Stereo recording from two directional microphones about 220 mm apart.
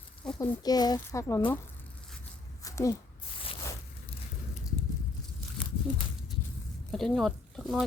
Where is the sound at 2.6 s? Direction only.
15° left (ahead or behind).